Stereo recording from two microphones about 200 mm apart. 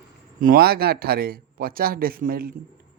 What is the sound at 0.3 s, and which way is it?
Speech, 45° right (ahead or behind).